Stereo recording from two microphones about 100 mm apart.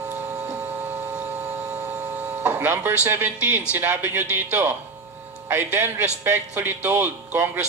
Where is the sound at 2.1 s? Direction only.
15° right (ahead or behind).